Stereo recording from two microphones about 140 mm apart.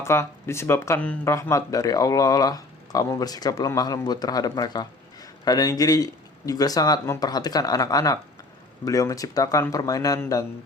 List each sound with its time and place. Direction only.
0.0 s speech: 20° left (ahead or behind)